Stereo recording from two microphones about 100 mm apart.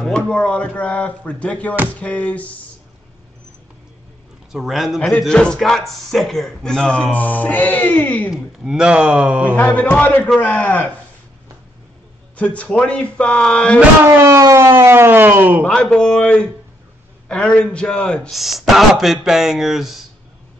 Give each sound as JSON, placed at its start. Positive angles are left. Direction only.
{"t": 0.0, "sound": "speech", "side_deg": 10}
{"t": 4.5, "sound": "speech", "side_deg": 0}
{"t": 8.4, "sound": "speech", "side_deg": -5}
{"t": 9.7, "sound": "speech", "side_deg": 10}
{"t": 12.4, "sound": "speech", "side_deg": 15}
{"t": 14.2, "sound": "speech", "side_deg": -30}
{"t": 15.6, "sound": "speech", "side_deg": 10}
{"t": 18.3, "sound": "speech", "side_deg": 0}